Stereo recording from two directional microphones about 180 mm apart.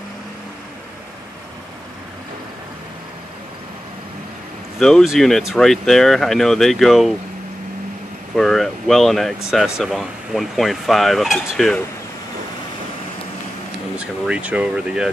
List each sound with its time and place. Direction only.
4.7 s speech: centre (ahead or behind)
8.4 s speech: centre (ahead or behind)
13.9 s speech: 5° right (ahead or behind)